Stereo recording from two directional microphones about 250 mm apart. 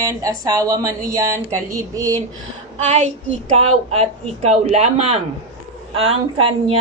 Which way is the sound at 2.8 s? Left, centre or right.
Right.